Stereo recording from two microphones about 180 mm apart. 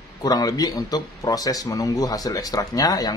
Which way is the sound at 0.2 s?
20° left (ahead or behind).